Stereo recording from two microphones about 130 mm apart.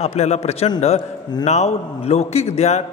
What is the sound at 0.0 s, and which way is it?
A man's voice, 55° left (ahead or behind).